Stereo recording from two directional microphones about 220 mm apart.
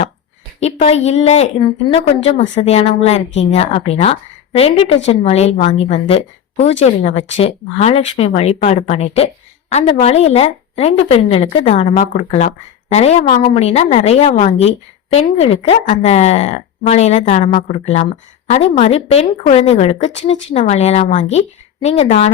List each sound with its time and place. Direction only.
0.6 s speech: 30° left (ahead or behind)